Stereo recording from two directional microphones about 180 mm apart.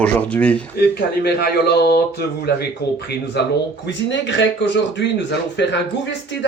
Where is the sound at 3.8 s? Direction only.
80° left.